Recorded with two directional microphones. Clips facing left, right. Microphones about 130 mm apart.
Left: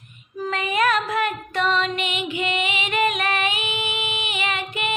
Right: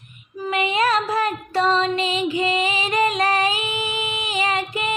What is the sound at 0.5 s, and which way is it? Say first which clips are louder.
Music: right 2 dB; 25° right (ahead or behind).